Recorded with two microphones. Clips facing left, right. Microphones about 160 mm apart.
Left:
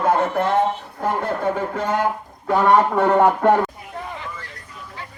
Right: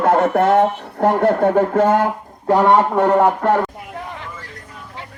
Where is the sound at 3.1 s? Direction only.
Centre (ahead or behind).